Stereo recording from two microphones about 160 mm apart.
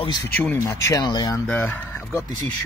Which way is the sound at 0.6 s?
20° left (ahead or behind).